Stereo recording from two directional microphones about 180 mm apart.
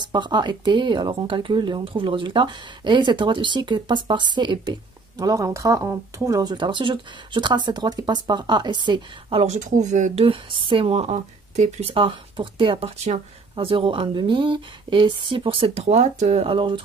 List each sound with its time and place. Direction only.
0.0 s speech: 25° right (ahead or behind)